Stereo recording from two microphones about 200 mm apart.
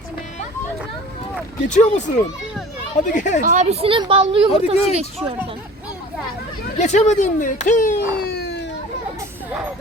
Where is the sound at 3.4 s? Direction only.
40° right (ahead or behind).